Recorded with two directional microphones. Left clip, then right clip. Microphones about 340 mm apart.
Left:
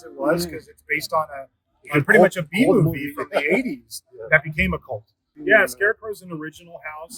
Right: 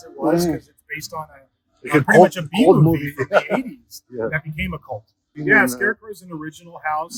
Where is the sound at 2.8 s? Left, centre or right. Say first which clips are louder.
Right 6 dB; right.